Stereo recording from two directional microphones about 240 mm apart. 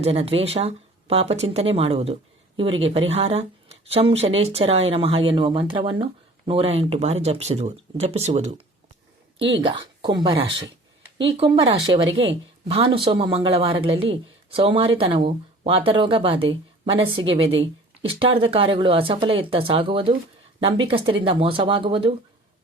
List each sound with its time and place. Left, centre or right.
0.0 s speech: right
9.6 s speech: right